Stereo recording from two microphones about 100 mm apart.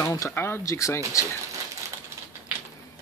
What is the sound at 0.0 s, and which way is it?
Speech, 25° left (ahead or behind).